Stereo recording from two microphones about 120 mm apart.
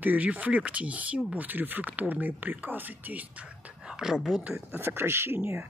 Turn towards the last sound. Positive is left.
turn(degrees=-20)  # may be behind; listen again after turning